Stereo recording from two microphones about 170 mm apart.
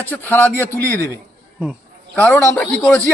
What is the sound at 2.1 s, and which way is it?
Speech, 10° left (ahead or behind).